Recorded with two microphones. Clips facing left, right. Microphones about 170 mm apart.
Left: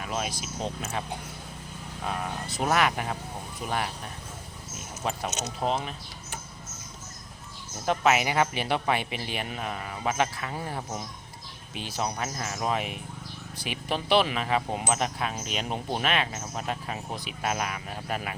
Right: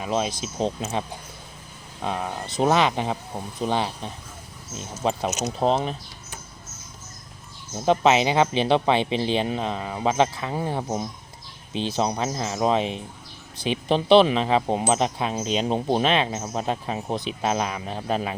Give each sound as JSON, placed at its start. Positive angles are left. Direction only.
{"t": 0.0, "sound": "speech", "side_deg": -25}
{"t": 2.6, "sound": "speech", "side_deg": -25}
{"t": 7.9, "sound": "speech", "side_deg": -25}